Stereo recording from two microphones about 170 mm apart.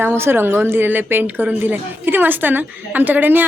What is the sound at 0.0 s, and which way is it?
A woman's voice, 15° right (ahead or behind).